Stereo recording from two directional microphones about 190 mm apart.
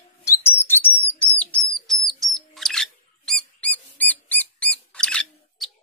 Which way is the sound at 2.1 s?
Centre (ahead or behind).